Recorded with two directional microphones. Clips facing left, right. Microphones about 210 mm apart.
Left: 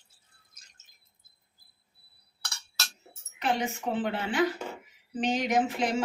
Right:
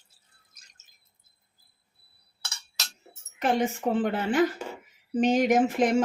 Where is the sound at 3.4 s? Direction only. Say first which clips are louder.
Right 5 dB; 50° right (ahead or behind).